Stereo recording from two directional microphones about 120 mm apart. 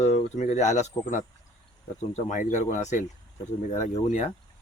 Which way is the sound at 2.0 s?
85° left.